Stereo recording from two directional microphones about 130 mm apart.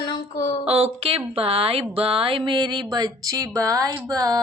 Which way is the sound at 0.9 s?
45° right (ahead or behind).